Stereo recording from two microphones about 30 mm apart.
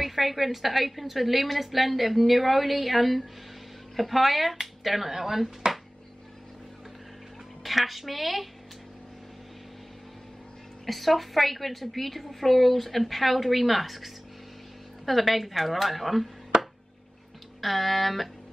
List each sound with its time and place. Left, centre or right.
0.0 s a woman's voice: centre
7.6 s a woman's voice: centre
10.9 s a woman's voice: centre
16.5 s a sound: right
17.6 s a woman's voice: centre